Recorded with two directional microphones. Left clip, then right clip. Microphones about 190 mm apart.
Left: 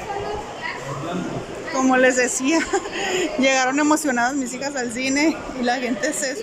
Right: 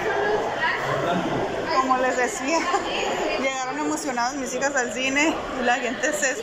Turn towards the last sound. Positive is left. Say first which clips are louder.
# even
turn(degrees=25)  # may be behind; listen again after turning